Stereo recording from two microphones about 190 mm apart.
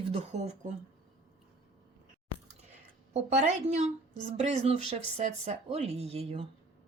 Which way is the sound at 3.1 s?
35° right (ahead or behind).